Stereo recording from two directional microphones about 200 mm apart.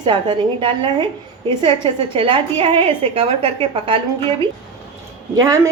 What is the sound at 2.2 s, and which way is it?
A woman's voice, 25° right (ahead or behind).